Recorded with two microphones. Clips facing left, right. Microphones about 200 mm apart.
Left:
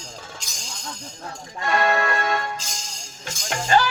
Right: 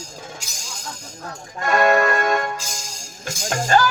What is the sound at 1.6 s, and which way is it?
Speech, 45° right (ahead or behind).